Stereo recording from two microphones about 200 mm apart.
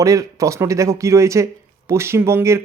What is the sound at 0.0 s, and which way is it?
Speech, 15° right (ahead or behind).